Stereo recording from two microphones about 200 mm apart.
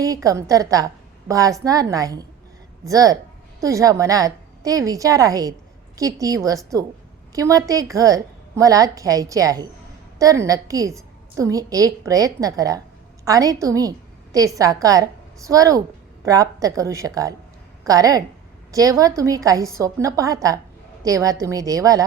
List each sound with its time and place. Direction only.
0.0 s a woman's voice: 15° right (ahead or behind)